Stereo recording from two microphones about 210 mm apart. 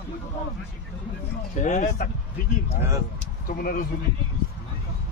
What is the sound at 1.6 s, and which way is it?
Speech, 35° left (ahead or behind).